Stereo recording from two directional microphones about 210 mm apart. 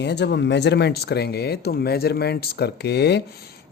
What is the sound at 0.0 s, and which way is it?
Speech, 55° left (ahead or behind).